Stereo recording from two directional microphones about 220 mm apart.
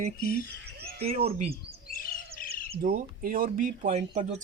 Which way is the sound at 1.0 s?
25° right (ahead or behind).